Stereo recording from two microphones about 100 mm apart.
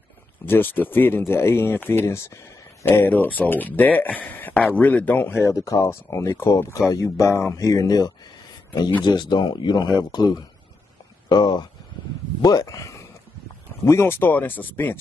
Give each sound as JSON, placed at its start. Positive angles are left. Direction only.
{"t": 0.5, "sound": "speech", "side_deg": 20}
{"t": 5.4, "sound": "speech", "side_deg": 35}
{"t": 9.0, "sound": "speech", "side_deg": 45}
{"t": 12.4, "sound": "speech", "side_deg": 35}